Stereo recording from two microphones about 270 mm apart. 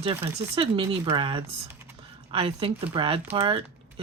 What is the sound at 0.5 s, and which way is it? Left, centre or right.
Speech, centre.